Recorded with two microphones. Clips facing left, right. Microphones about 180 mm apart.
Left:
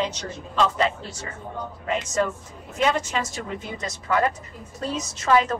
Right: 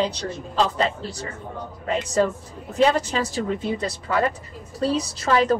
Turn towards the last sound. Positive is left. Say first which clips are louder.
# right 1 dB
turn(degrees=-35)  # may be behind; listen again after turning